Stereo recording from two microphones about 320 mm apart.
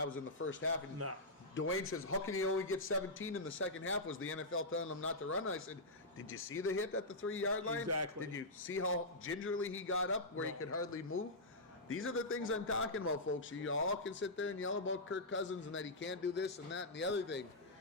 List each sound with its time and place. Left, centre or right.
0.3 s a man's voice: left
7.9 s a man's voice: right
8.2 s a man's voice: left